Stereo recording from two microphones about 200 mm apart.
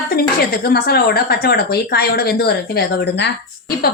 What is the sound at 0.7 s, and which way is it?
Speech, 50° left (ahead or behind).